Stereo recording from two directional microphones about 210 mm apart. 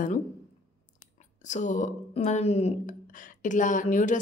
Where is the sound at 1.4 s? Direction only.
35° left (ahead or behind).